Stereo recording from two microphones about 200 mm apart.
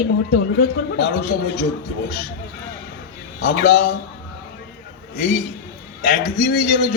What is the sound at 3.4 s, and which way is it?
Speech, 60° left (ahead or behind).